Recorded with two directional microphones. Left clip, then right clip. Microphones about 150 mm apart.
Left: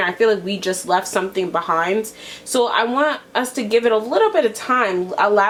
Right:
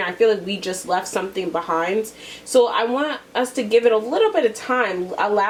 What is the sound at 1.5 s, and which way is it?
Speech, 45° left (ahead or behind).